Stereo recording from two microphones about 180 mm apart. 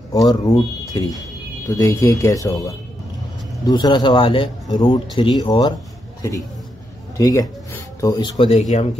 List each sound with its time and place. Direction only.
0.1 s speech: 20° left (ahead or behind)
7.2 s speech: 20° left (ahead or behind); by 8.8 s 40° left (ahead or behind)